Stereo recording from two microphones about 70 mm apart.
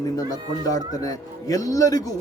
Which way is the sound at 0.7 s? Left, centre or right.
Left.